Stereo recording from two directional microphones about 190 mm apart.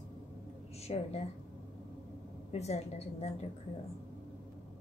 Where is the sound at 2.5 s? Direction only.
35° left (ahead or behind).